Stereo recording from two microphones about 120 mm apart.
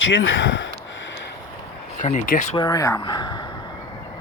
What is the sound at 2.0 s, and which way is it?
Speech, 90° left.